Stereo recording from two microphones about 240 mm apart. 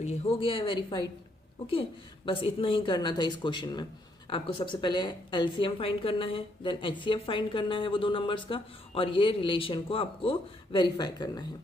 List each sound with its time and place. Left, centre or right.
0.0 s a woman's voice: left
2.2 s a woman's voice: left